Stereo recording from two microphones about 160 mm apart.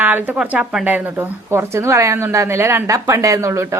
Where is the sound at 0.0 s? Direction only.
10° right (ahead or behind).